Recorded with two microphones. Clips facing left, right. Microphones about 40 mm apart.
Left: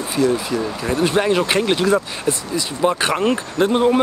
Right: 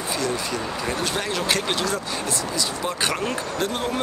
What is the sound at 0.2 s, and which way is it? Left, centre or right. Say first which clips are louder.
Speech: left 11 dB; centre.